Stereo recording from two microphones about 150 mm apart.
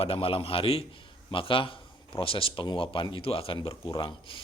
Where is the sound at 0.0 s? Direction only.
40° left (ahead or behind).